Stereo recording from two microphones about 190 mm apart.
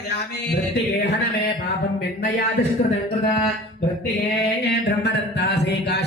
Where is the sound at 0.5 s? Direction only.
65° left (ahead or behind).